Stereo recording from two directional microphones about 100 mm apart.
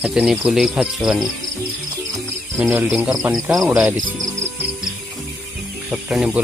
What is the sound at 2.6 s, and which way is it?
Speech, 10° right (ahead or behind).